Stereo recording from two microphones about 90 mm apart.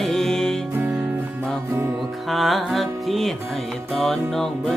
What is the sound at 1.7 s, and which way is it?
Music, 30° right (ahead or behind).